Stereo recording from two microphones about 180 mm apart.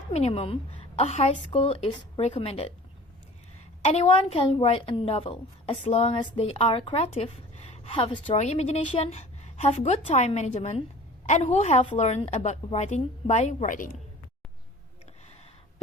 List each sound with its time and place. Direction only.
0.1 s speech: 35° left (ahead or behind)
3.8 s speech: 35° left (ahead or behind)